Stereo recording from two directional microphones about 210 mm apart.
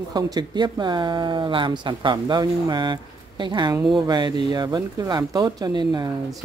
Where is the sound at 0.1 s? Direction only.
20° right (ahead or behind).